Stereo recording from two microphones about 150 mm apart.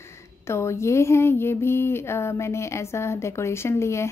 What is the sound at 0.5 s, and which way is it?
Speech, 20° left (ahead or behind).